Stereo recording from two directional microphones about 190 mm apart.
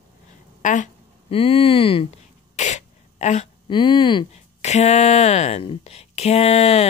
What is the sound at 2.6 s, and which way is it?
Sneeze, 40° left (ahead or behind).